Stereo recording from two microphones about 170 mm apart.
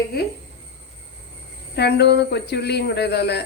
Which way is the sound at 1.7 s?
80° left.